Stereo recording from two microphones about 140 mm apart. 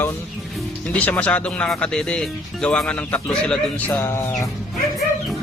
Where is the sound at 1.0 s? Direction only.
10° left (ahead or behind).